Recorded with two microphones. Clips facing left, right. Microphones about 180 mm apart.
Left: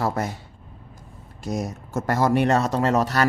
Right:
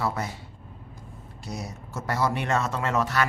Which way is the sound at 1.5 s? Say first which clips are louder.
Left 8 dB; 45° left (ahead or behind).